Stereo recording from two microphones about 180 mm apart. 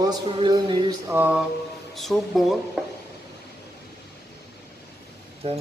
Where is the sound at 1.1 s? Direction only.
10° right (ahead or behind).